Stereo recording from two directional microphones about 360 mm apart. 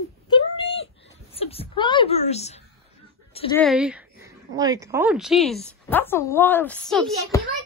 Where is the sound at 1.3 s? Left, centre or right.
Centre.